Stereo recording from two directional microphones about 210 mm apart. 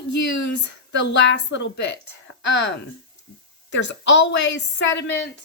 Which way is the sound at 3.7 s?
60° left (ahead or behind).